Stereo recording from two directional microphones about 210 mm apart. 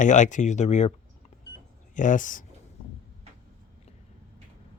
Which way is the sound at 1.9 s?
35° left (ahead or behind).